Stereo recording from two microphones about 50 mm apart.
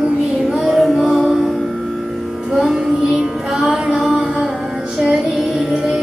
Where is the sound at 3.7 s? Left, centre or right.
Right.